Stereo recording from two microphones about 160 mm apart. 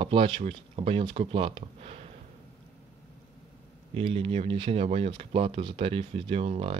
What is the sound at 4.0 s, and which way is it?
Speech, 35° right (ahead or behind).